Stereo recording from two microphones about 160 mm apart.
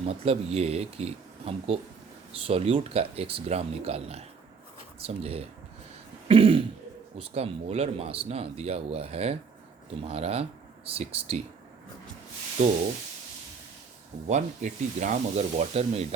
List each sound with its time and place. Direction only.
0.0 s speech: 40° right (ahead or behind)
6.2 s throat clearing: 35° right (ahead or behind)
7.2 s speech: 40° right (ahead or behind)
14.3 s speech: 50° right (ahead or behind)